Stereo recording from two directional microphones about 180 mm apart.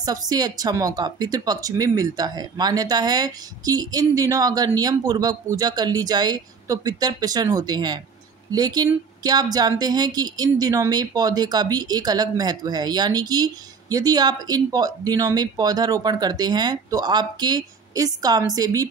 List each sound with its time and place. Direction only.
0.0 s speech: 20° right (ahead or behind)